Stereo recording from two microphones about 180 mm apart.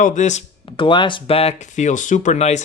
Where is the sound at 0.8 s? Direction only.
25° left (ahead or behind).